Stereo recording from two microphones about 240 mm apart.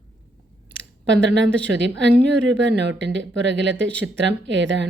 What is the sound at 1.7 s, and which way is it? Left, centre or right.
A woman's voice, right.